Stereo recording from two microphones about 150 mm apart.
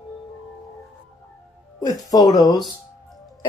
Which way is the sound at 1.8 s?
25° left (ahead or behind).